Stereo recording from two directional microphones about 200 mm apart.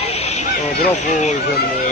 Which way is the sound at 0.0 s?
30° left (ahead or behind).